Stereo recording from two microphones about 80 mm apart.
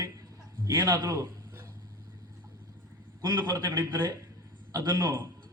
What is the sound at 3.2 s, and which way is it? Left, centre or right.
Speech, right.